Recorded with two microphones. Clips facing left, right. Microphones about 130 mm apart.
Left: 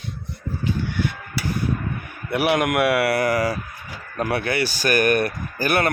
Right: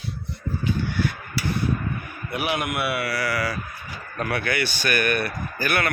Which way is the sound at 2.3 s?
75° left (ahead or behind).